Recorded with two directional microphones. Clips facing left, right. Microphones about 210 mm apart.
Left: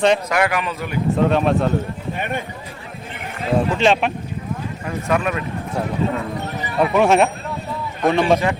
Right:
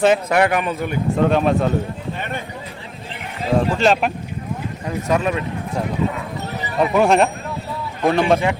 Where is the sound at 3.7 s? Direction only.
Centre (ahead or behind).